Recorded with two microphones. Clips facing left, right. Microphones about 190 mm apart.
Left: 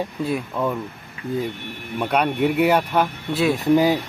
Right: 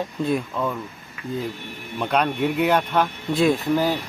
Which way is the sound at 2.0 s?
10° left (ahead or behind).